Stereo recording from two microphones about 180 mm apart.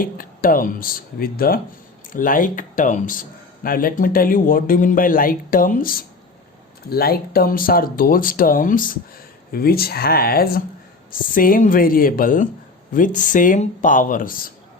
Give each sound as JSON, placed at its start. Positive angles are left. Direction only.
{"t": 0.0, "sound": "speech", "side_deg": 50}